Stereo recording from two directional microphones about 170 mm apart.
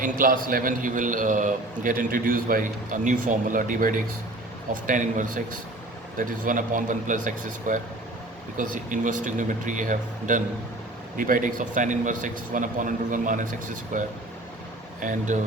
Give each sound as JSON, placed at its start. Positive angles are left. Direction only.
{"t": 0.0, "sound": "a man's voice", "side_deg": -55}
{"t": 15.0, "sound": "a man's voice", "side_deg": -50}